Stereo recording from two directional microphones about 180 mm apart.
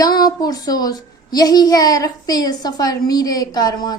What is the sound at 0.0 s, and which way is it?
A woman's voice, 20° left (ahead or behind).